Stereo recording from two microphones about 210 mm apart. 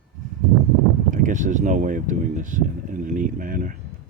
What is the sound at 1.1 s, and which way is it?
Speech, 35° right (ahead or behind).